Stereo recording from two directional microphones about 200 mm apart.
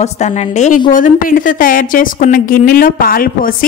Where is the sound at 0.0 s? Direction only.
35° left (ahead or behind).